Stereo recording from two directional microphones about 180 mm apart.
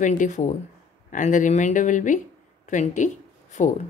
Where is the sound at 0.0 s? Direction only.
45° left (ahead or behind).